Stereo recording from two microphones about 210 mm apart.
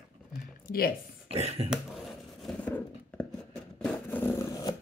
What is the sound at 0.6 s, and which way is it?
Speech, 45° left (ahead or behind).